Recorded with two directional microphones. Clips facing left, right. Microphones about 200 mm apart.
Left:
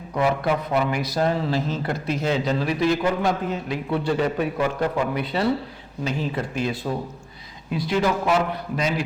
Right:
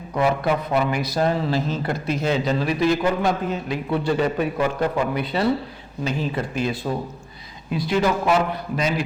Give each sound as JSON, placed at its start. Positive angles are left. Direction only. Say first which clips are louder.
{"t": 0.1, "sound": "a man's voice", "louder": "right 1 dB", "side_deg": -20}
{"t": 5.1, "sound": "speech", "louder": "right 1 dB", "side_deg": -10}